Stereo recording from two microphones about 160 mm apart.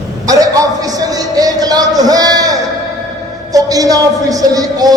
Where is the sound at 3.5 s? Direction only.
20° right (ahead or behind).